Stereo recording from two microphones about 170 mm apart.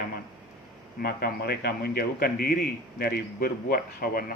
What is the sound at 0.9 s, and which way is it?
A man's voice, 65° left (ahead or behind).